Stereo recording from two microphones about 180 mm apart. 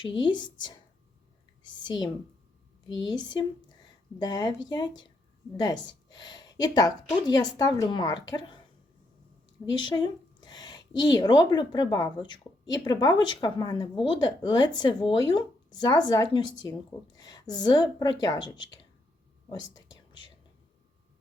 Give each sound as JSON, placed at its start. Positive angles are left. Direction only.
{"t": 0.0, "sound": "a woman's voice", "side_deg": 25}
{"t": 1.6, "sound": "speech", "side_deg": 25}
{"t": 3.1, "sound": "a woman's voice", "side_deg": 25}
{"t": 9.8, "sound": "a woman's voice", "side_deg": 25}
{"t": 19.5, "sound": "whispering", "side_deg": 20}